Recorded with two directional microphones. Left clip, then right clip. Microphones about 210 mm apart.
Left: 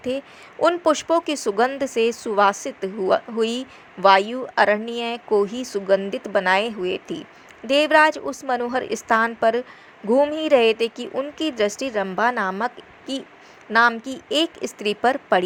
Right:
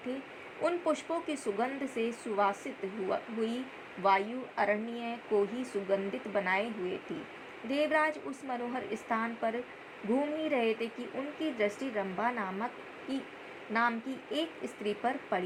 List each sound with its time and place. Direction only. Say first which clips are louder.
0.6 s speech: left 13 dB; 35° left (ahead or behind)